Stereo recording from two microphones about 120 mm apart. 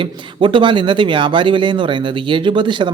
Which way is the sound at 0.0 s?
45° right (ahead or behind).